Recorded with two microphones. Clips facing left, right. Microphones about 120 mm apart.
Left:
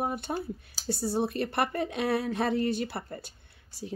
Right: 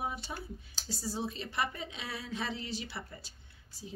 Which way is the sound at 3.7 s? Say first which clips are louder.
Left 8 dB; 70° left (ahead or behind).